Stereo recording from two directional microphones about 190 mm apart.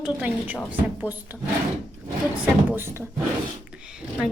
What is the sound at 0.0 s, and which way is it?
Speech, 5° right (ahead or behind).